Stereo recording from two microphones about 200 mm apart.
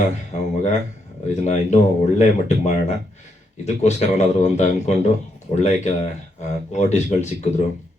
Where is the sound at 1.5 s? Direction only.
35° left (ahead or behind).